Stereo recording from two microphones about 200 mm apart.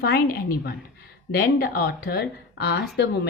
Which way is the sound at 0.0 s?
50° left (ahead or behind).